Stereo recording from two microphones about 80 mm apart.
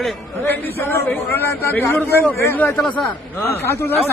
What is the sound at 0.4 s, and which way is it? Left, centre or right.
Speech, left.